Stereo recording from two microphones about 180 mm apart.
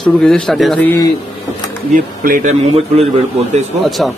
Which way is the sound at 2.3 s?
45° right (ahead or behind).